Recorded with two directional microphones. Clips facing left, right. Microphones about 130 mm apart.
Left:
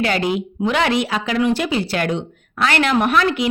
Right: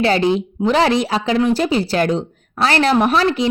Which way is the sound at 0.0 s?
30° right (ahead or behind).